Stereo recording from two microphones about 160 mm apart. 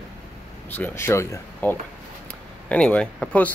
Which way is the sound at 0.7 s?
10° left (ahead or behind).